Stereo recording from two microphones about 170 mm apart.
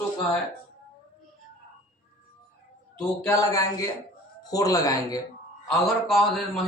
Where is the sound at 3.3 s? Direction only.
20° left (ahead or behind).